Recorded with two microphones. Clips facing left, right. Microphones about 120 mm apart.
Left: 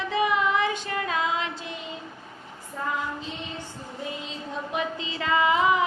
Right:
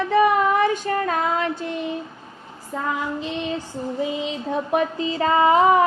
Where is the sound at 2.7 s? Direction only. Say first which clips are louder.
Right 5 dB; 70° right (ahead or behind).